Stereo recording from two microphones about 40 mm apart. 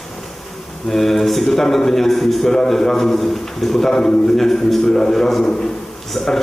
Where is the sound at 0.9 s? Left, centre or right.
Centre.